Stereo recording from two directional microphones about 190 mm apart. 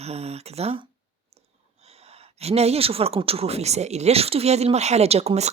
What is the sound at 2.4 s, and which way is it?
Speech, 35° right (ahead or behind).